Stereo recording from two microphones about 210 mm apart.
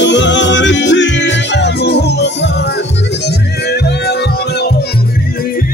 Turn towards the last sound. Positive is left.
turn(degrees=50)  # may be behind; listen again after turning